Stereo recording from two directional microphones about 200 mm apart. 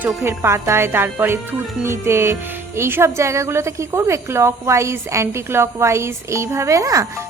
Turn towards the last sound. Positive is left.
turn(degrees=-15)  # may be behind; listen again after turning